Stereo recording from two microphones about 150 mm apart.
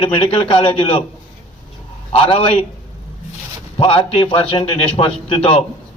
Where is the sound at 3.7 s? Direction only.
40° left (ahead or behind).